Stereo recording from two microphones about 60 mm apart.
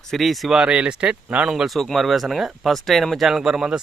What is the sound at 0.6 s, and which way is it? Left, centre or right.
Speech, centre.